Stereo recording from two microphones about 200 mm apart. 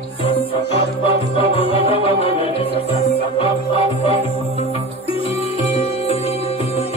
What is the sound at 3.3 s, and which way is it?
Music, 25° left (ahead or behind).